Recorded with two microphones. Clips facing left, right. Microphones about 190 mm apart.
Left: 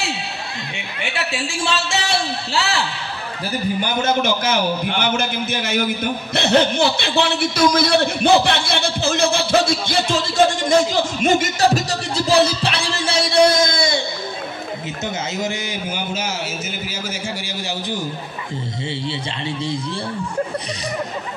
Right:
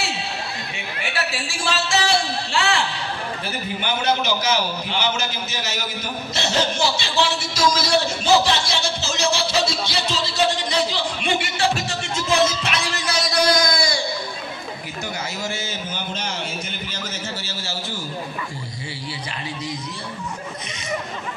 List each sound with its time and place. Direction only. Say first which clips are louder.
1.6 s speech: right 2 dB; centre (ahead or behind)
3.8 s a man's voice: left 1 dB; 50° left (ahead or behind); by 14.0 s 25° left (ahead or behind)